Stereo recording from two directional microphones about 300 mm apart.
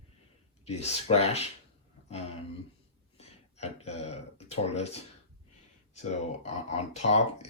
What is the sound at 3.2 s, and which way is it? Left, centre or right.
Speech, left.